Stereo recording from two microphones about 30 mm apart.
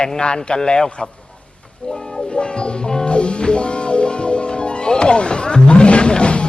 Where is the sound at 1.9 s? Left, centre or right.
Centre.